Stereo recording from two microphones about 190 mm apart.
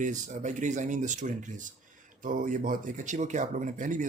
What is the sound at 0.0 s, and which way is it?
Speech, 40° right (ahead or behind).